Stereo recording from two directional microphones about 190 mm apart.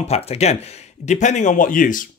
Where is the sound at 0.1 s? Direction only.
35° left (ahead or behind).